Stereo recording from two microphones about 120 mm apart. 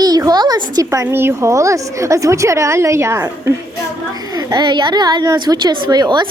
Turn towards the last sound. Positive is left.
turn(degrees=-35)  # may be behind; listen again after turning